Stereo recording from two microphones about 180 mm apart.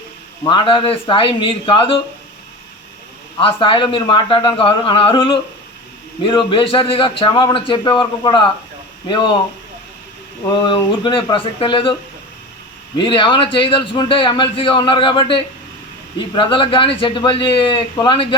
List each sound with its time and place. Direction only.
0.4 s a man's voice: 25° left (ahead or behind)
3.4 s a man's voice: 30° left (ahead or behind)
10.4 s a man's voice: 25° left (ahead or behind)
13.0 s a man's voice: 25° left (ahead or behind)